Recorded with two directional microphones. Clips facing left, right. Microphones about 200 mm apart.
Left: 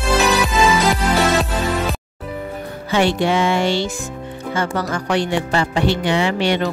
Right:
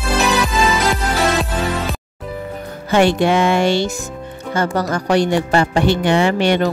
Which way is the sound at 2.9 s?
50° right (ahead or behind).